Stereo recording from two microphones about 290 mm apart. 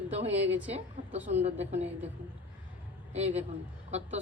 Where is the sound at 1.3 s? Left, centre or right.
Right.